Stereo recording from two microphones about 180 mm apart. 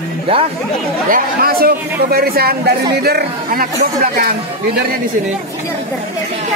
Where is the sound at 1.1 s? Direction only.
55° right (ahead or behind).